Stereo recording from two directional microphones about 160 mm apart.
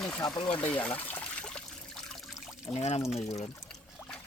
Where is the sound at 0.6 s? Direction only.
10° left (ahead or behind).